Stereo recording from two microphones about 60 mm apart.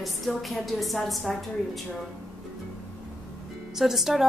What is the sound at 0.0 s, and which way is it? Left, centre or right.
A woman's voice, centre.